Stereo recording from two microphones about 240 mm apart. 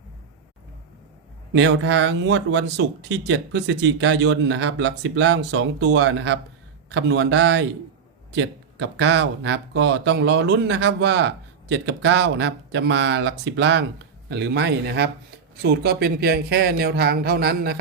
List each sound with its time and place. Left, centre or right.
1.5 s speech: right